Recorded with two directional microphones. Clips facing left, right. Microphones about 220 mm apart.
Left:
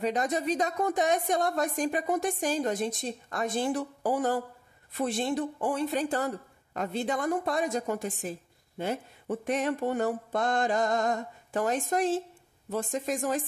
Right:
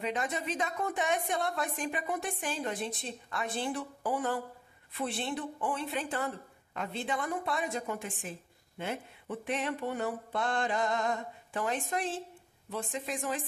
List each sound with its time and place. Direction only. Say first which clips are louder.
0.0 s a woman's voice: left 6 dB; 40° left (ahead or behind)